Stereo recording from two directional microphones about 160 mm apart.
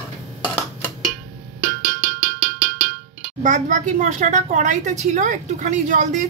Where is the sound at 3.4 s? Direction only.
50° right (ahead or behind).